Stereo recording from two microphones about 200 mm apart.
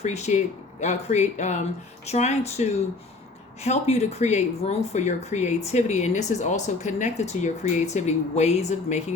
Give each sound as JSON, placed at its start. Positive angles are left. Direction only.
{"t": 0.0, "sound": "speech", "side_deg": 35}